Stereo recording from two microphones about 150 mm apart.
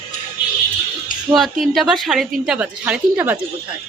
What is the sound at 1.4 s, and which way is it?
Speech, centre (ahead or behind).